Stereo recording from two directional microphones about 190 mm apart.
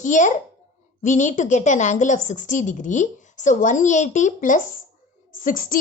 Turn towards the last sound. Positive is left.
turn(degrees=45)  # may be behind; listen again after turning